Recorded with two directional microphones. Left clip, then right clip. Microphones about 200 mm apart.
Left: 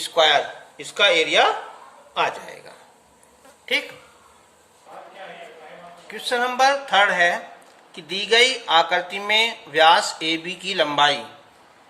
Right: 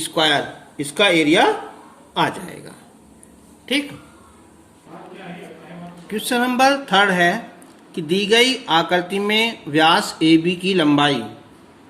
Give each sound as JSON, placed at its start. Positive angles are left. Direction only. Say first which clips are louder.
{"t": 0.0, "sound": "speech", "louder": "left 1 dB", "side_deg": -15}
{"t": 6.1, "sound": "speech", "louder": "right 2 dB", "side_deg": -15}